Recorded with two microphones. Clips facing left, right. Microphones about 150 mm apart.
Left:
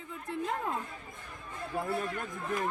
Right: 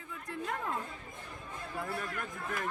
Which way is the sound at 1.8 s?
25° left (ahead or behind).